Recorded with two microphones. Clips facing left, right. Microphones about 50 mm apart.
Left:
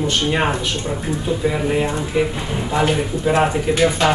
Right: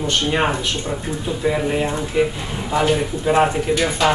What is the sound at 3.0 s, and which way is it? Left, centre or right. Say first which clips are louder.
Speech: even; centre.